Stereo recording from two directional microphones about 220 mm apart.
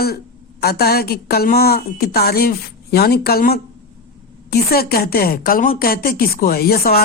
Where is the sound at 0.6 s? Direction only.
45° left (ahead or behind).